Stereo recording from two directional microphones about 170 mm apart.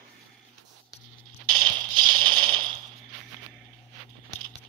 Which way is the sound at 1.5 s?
25° right (ahead or behind).